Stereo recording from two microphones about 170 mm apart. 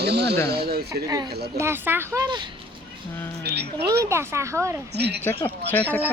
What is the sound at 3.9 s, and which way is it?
Speech, 20° right (ahead or behind).